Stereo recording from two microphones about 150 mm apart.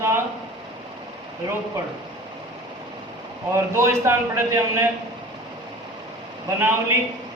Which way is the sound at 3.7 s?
20° right (ahead or behind).